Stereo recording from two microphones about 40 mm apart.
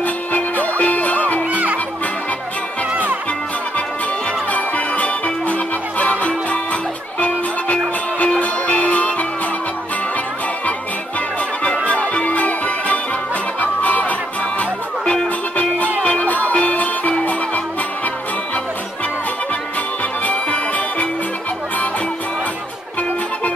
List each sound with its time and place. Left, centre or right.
0.0 s music: left
1.5 s music: right
2.9 s music: right
4.5 s music: left
11.6 s music: left
16.1 s music: left
20.2 s music: left